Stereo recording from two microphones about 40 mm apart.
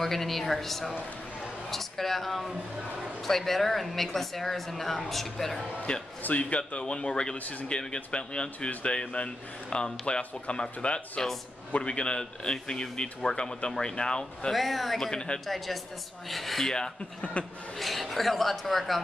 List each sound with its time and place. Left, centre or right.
0.0 s speech: centre
5.9 s speech: left
6.2 s speech: left
6.8 s speech: left
14.5 s speech: centre
15.0 s speech: centre
15.4 s speech: centre
17.2 s speech: left
17.7 s speech: centre